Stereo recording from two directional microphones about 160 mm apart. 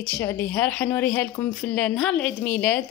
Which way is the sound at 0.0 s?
15° left (ahead or behind).